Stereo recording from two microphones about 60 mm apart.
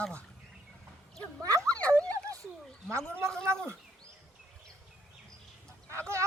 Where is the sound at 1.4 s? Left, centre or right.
Right.